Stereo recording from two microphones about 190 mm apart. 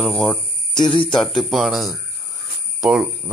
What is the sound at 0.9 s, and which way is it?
Speech, 25° left (ahead or behind).